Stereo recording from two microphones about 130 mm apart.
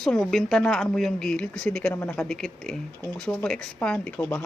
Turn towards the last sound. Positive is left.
turn(degrees=10)  # may be behind; listen again after turning